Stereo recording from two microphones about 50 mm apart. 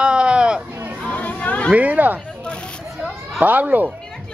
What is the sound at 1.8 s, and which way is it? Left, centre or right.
Speech, right.